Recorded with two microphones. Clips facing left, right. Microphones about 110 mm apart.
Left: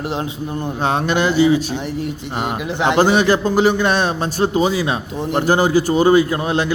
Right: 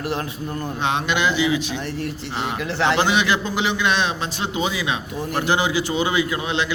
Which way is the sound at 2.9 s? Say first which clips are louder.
Left 6 dB; 45° left (ahead or behind).